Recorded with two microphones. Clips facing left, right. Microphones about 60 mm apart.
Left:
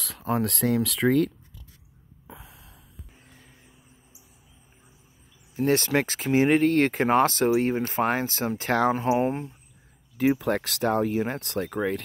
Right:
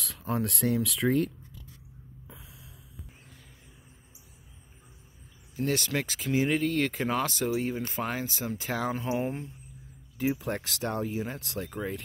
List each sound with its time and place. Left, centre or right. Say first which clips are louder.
0.0 s speech: left 5 dB; left
2.2 s a sound: left 7 dB; left
5.7 s speech: left 7 dB; left
10.1 s speech: left 7 dB; left